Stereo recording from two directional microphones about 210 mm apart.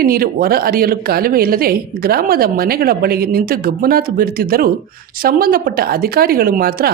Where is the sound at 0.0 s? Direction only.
45° right (ahead or behind).